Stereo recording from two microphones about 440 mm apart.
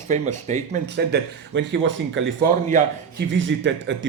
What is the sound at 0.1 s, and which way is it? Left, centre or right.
Speech, centre.